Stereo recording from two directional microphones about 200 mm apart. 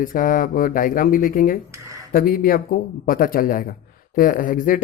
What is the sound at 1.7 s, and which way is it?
Speech, 15° right (ahead or behind).